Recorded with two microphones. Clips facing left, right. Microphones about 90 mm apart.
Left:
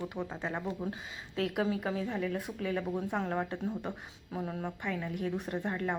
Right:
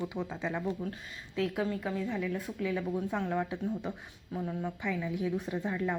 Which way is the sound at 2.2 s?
65° left (ahead or behind).